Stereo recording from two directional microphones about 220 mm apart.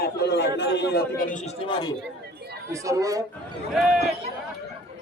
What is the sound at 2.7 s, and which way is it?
Speech, 15° right (ahead or behind).